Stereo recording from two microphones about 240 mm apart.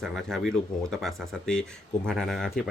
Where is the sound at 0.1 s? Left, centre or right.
Centre.